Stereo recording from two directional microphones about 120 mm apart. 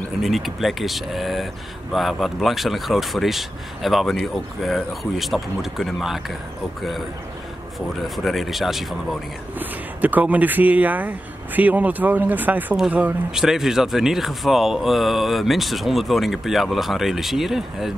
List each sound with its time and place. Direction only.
0.2 s speech: centre (ahead or behind)
8.2 s speech: centre (ahead or behind)
9.6 s speech: 15° right (ahead or behind)